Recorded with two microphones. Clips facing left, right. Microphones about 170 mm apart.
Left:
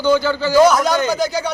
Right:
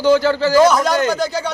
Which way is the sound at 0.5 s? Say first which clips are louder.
Left 2 dB; centre (ahead or behind).